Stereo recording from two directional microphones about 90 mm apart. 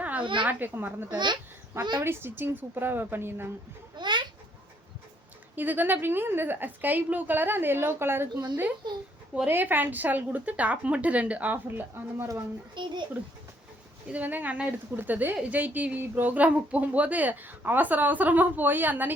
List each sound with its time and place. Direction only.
0.0 s a sound: 15° right (ahead or behind)
0.4 s speech: 20° right (ahead or behind)
1.1 s a child's voice: 55° right (ahead or behind)
2.0 s speech: 25° right (ahead or behind)
3.9 s a sound: 55° right (ahead or behind)
5.5 s speech: 20° right (ahead or behind)
8.8 s a child's voice: 55° right (ahead or behind)
9.5 s speech: 20° right (ahead or behind)
12.7 s a child's voice: 60° right (ahead or behind)
14.1 s speech: 20° right (ahead or behind)